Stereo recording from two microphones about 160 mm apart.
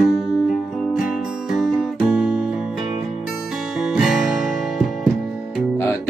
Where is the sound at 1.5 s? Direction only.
Centre (ahead or behind).